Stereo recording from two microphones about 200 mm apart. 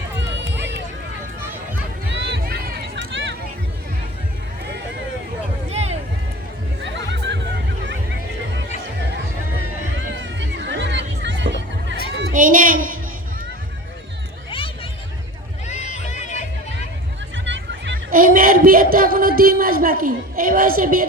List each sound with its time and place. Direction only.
2.1 s run: 65° right (ahead or behind)
2.4 s run: 50° right (ahead or behind)
3.1 s a sound: 65° right (ahead or behind)
5.7 s music: 30° right (ahead or behind)
6.8 s music: 65° right (ahead or behind)
10.2 s music: 65° right (ahead or behind)
12.3 s a sound: 40° right (ahead or behind)
15.6 s music: 35° left (ahead or behind)
17.3 s music: 65° right (ahead or behind)
17.9 s speech: 45° right (ahead or behind)